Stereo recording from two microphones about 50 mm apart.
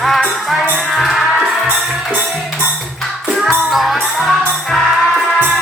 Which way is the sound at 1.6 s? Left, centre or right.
Right.